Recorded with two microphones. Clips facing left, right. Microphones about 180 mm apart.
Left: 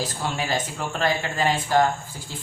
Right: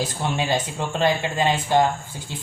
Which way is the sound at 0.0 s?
20° right (ahead or behind).